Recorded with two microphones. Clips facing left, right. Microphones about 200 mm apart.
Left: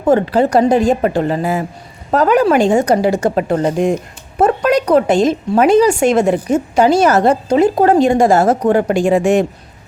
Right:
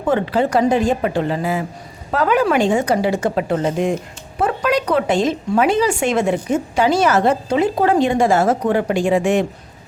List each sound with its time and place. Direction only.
0.1 s a woman's voice: 40° left (ahead or behind)